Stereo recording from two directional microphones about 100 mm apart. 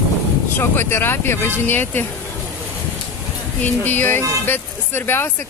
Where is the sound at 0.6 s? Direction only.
20° left (ahead or behind).